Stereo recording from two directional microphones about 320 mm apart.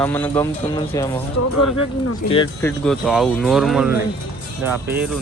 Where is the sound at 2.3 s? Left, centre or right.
Centre.